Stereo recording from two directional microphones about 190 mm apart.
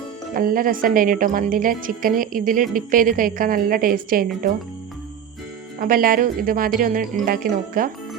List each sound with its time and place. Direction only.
0.3 s a woman's voice: 50° right (ahead or behind)
5.8 s a woman's voice: 50° right (ahead or behind)